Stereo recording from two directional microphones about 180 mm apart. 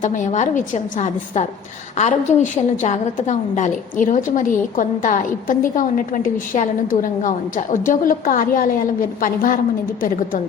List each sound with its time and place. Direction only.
0.0 s a woman's voice: 40° left (ahead or behind)